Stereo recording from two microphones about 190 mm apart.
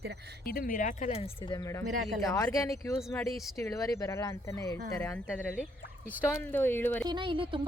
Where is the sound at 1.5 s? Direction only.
20° left (ahead or behind).